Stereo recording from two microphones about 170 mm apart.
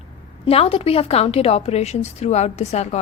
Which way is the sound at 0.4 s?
35° left (ahead or behind).